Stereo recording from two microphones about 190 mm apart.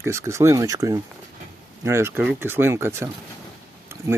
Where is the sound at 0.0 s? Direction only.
15° right (ahead or behind).